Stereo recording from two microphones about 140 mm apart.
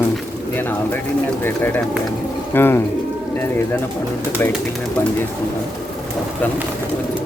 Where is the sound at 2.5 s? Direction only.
15° left (ahead or behind).